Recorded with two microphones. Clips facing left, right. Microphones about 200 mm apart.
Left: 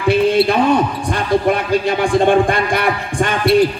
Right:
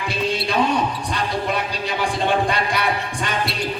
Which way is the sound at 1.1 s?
50° left (ahead or behind).